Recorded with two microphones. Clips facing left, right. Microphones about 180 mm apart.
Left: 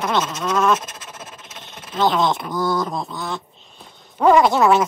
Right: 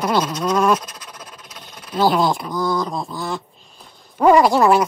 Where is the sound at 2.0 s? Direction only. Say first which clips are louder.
Right 2 dB; 5° right (ahead or behind).